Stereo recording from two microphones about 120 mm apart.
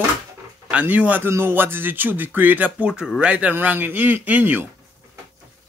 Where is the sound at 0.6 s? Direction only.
10° right (ahead or behind).